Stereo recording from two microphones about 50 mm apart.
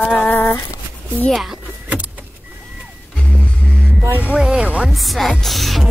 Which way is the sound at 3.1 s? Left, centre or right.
Centre.